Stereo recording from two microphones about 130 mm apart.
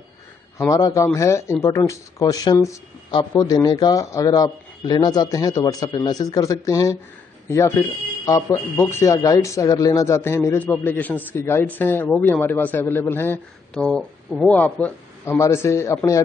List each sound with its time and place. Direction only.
0.7 s a man's voice: 30° left (ahead or behind)